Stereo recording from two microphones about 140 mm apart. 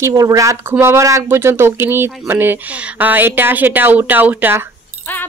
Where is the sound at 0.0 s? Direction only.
25° right (ahead or behind).